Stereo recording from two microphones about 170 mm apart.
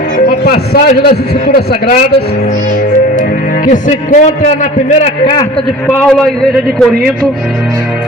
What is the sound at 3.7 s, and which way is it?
A man's voice, 45° left (ahead or behind).